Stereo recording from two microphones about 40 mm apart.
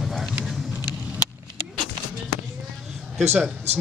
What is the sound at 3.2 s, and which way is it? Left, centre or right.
Speech, centre.